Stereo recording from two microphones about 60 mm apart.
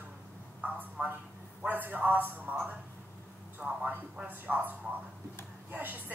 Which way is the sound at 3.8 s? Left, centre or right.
Right.